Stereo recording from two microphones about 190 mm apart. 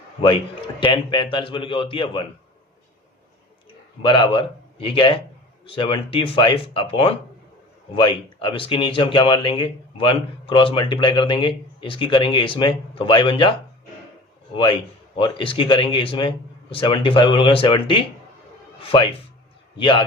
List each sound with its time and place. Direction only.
0.8 s speech: 25° left (ahead or behind)
4.0 s speech: 25° left (ahead or behind)
14.5 s speech: 25° left (ahead or behind)